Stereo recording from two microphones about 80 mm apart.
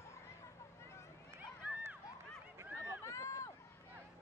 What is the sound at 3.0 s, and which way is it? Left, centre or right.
Run, left.